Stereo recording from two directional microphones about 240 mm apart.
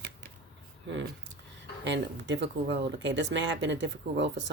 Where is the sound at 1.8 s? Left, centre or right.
Right.